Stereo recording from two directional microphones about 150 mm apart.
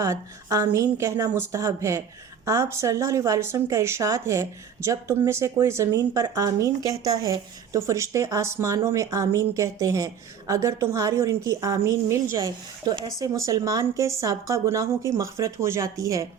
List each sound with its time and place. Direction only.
0.0 s speech: 20° right (ahead or behind)